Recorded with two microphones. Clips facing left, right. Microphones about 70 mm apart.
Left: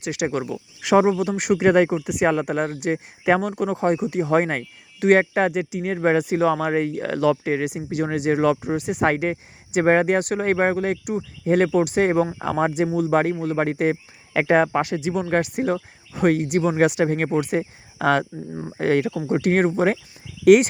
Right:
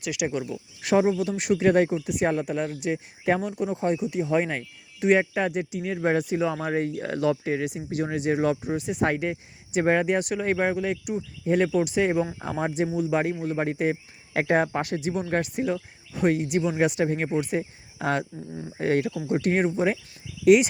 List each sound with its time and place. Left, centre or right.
0.1 s speech: left
0.4 s speech: left
3.2 s speech: left
12.4 s speech: left
12.9 s speech: left
13.4 s speech: left
14.4 s speech: left
15.6 s speech: left
18.0 s speech: left
19.3 s speech: left
20.4 s speech: left